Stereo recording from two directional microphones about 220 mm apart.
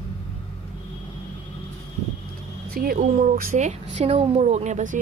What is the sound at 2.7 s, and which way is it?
A woman's voice, 40° right (ahead or behind).